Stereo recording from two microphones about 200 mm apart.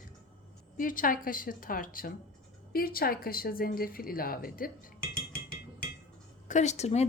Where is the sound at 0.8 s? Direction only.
45° left (ahead or behind).